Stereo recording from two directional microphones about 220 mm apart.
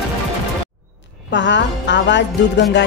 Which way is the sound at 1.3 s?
55° left (ahead or behind).